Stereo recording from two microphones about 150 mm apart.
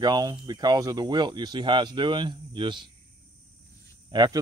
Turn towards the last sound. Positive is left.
turn(degrees=-25)  # may be behind; listen again after turning